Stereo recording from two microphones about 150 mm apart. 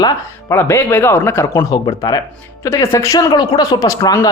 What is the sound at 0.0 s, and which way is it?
A man's voice, 20° left (ahead or behind).